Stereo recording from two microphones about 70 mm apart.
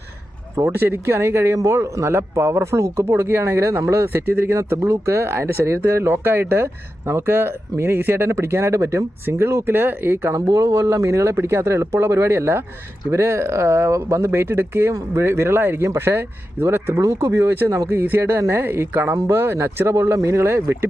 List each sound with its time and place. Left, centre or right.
0.6 s speech: right
10.3 s speech: right